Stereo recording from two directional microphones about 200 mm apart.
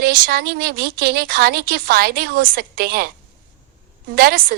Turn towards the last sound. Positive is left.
turn(degrees=-50)  # may be behind; listen again after turning